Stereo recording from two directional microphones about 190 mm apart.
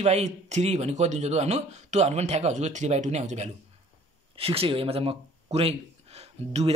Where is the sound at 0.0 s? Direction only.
35° right (ahead or behind).